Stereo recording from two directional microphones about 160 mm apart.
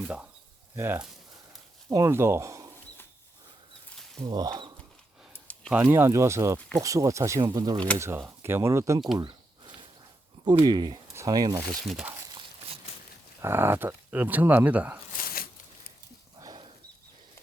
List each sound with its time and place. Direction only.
0.8 s speech: 15° right (ahead or behind)
4.3 s speech: 25° right (ahead or behind)
5.3 s a sound: 10° left (ahead or behind)
5.7 s speech: 10° right (ahead or behind)
10.4 s speech: 30° right (ahead or behind)
11.7 s speech: centre (ahead or behind)
13.4 s speech: 15° right (ahead or behind)
15.1 s a sound: 65° left (ahead or behind)
16.4 s a sound: 30° right (ahead or behind)